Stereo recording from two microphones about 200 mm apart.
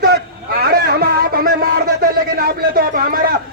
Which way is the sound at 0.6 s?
50° right (ahead or behind).